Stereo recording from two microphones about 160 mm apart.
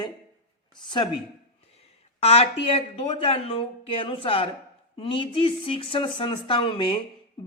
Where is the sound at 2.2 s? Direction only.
40° left (ahead or behind).